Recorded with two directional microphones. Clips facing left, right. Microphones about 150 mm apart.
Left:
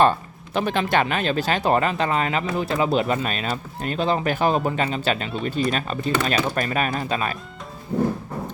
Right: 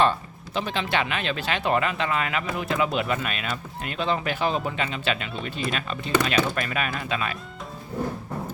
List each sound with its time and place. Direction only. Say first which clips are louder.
0.0 s speech: left 4 dB; 50° left (ahead or behind)